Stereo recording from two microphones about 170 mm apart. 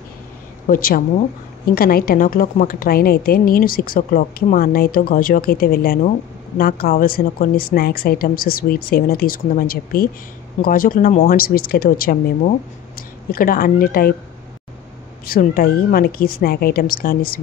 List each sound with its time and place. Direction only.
0.7 s a woman's voice: 60° left (ahead or behind)
15.2 s a woman's voice: 60° left (ahead or behind)